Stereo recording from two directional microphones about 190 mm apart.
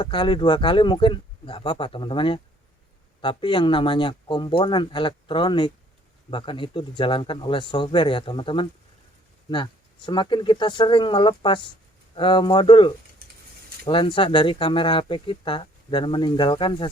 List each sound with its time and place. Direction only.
0.0 s speech: 25° left (ahead or behind)
10.1 s speech: 25° left (ahead or behind)